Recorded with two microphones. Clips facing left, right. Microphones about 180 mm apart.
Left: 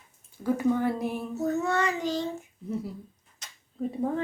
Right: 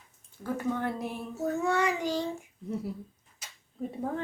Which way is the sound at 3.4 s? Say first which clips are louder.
Even; 5° right (ahead or behind).